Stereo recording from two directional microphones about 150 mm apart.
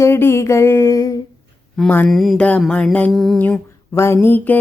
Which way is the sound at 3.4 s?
15° left (ahead or behind).